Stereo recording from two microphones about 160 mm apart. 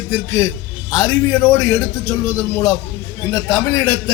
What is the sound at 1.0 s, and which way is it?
A man's voice, 15° left (ahead or behind).